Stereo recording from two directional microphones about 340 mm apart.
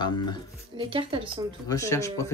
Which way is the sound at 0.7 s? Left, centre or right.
Centre.